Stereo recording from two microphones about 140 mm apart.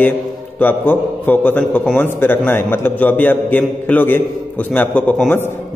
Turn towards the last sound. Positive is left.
turn(degrees=10)  # may be behind; listen again after turning